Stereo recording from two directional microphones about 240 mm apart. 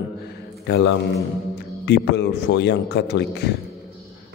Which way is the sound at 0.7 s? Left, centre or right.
Left.